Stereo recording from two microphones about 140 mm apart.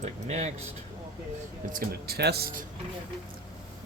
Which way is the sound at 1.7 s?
90° right.